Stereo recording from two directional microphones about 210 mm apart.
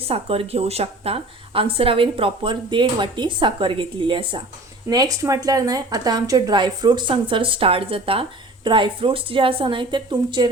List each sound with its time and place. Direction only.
0.0 s a woman's voice: 25° right (ahead or behind)